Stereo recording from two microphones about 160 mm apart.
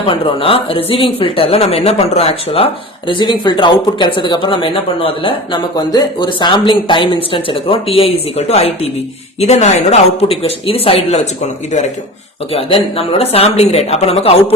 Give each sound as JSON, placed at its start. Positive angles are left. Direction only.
{"t": 0.0, "sound": "speech", "side_deg": 35}
{"t": 12.5, "sound": "speech", "side_deg": 35}